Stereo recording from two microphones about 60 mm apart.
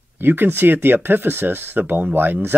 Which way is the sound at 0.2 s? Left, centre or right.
Right.